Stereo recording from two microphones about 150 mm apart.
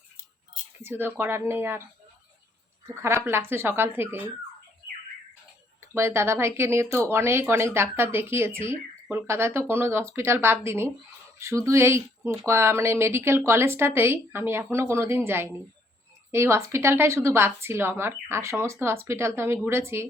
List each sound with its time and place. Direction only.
0.8 s speech: 15° right (ahead or behind)
5.9 s speech: 15° right (ahead or behind)